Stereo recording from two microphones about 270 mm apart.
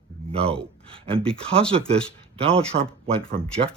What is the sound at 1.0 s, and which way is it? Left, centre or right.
Speech, right.